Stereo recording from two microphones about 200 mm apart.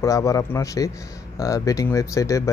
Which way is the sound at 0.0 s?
15° left (ahead or behind).